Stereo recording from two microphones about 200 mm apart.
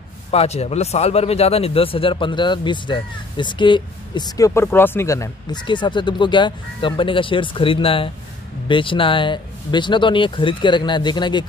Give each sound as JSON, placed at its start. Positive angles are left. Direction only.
{"t": 0.3, "sound": "a man's voice", "side_deg": 30}